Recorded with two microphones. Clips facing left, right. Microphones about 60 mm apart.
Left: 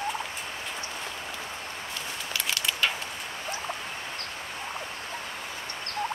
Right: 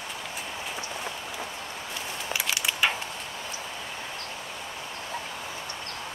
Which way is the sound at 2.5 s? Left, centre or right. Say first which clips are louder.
Right 1 dB; centre.